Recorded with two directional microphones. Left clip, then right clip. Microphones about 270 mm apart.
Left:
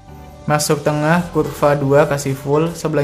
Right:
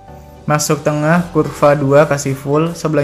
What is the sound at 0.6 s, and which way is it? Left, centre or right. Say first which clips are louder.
Speech: right 1 dB; centre.